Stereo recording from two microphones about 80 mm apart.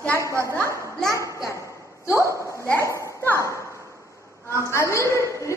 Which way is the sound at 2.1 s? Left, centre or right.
Right.